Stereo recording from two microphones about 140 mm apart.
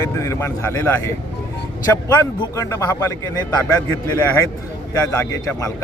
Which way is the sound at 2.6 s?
20° left (ahead or behind).